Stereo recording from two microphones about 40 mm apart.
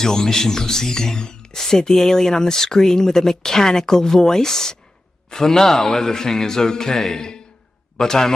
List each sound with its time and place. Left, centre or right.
0.0 s speech: centre